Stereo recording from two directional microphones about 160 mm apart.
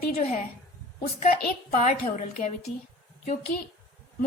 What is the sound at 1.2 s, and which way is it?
A woman's voice, 60° left (ahead or behind).